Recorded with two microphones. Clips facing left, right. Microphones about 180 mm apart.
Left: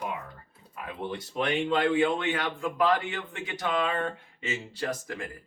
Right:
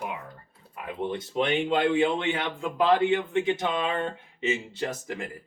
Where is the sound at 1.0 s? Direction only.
25° right (ahead or behind).